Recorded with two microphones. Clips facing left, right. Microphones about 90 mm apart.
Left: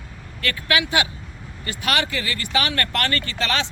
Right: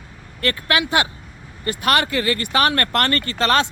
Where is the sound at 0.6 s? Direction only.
45° right (ahead or behind).